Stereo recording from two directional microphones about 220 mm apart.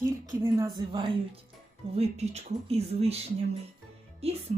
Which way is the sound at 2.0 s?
30° right (ahead or behind).